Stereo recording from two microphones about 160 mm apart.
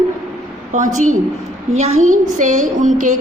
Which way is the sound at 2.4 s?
50° right (ahead or behind).